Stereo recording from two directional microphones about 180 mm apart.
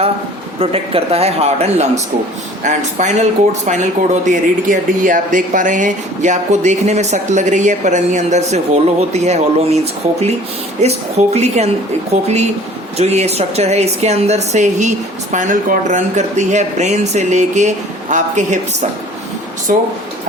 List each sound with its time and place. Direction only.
0.6 s speech: 30° right (ahead or behind)
13.0 s speech: 35° right (ahead or behind)